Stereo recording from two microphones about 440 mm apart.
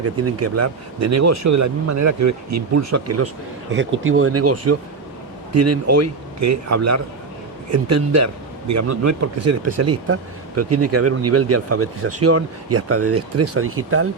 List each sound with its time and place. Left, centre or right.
0.0 s speech: right